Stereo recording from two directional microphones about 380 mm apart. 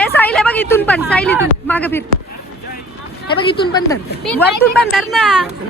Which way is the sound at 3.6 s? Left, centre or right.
Centre.